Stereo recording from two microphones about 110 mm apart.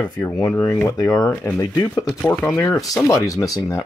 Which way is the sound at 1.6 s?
40° left (ahead or behind).